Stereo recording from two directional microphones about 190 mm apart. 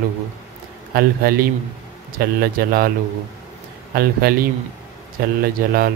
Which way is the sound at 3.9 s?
50° right (ahead or behind).